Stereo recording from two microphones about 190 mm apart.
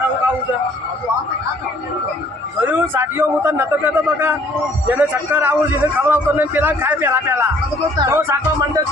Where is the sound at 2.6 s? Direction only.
10° right (ahead or behind).